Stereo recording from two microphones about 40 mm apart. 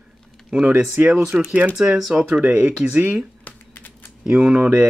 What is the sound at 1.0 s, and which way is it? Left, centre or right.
Speech, right.